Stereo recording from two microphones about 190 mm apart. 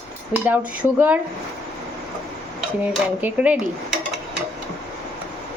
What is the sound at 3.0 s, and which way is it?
Speech, 5° right (ahead or behind).